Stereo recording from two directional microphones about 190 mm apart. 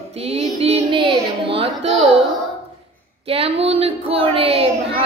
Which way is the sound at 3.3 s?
30° right (ahead or behind).